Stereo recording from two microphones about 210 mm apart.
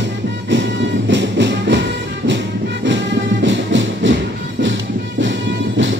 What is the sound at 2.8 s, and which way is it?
Music, 60° right (ahead or behind).